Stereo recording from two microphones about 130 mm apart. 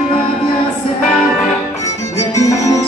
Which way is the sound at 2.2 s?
25° left (ahead or behind).